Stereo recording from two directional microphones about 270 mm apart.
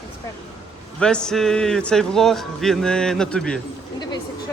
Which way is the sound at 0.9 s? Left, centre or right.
Centre.